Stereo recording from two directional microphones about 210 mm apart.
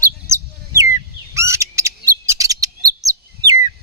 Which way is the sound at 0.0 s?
15° right (ahead or behind).